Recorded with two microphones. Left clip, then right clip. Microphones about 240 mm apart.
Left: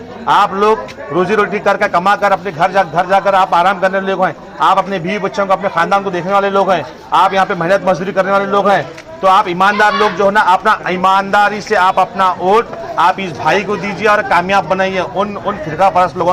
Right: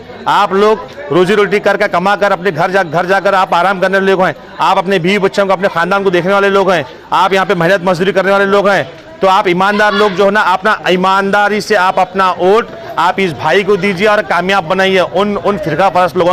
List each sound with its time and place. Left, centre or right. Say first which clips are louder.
0.3 s a man's voice: right 1 dB; right